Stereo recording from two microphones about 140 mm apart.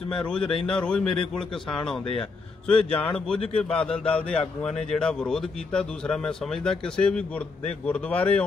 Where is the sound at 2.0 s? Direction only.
40° left (ahead or behind).